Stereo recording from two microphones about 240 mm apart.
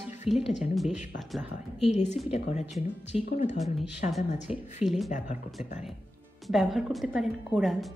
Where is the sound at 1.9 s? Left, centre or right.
Left.